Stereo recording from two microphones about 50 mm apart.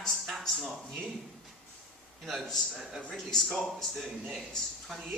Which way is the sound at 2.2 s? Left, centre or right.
Centre.